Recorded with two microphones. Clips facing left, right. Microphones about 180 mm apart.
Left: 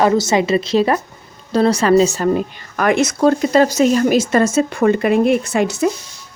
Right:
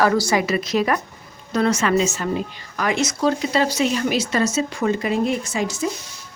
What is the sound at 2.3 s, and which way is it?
Speech, 50° left (ahead or behind).